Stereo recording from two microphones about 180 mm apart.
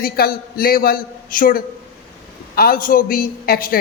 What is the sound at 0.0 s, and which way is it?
A man's voice, 55° left (ahead or behind).